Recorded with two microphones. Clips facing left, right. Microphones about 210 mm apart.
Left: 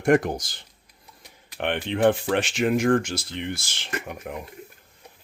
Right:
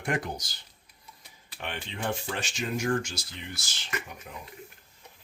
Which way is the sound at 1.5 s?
65° left (ahead or behind).